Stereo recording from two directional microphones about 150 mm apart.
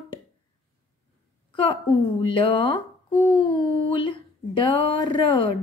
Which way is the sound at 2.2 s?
35° left (ahead or behind).